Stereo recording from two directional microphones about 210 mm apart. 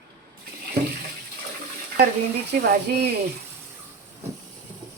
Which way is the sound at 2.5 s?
50° right (ahead or behind).